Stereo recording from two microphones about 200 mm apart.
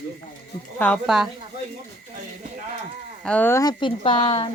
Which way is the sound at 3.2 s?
10° left (ahead or behind).